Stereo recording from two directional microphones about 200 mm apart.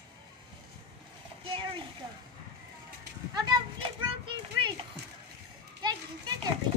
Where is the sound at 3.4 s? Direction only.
25° right (ahead or behind).